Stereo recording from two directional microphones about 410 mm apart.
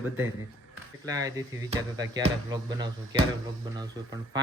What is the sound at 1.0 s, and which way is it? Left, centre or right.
Speech, centre.